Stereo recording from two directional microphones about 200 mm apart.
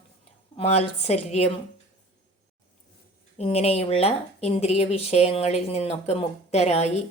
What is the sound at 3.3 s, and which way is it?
Speech, 30° left (ahead or behind).